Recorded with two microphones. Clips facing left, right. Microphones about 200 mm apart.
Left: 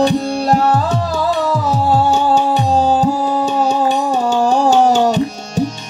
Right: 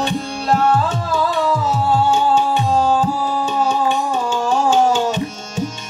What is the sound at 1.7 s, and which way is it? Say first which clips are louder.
Music: left 2 dB; 40° left (ahead or behind).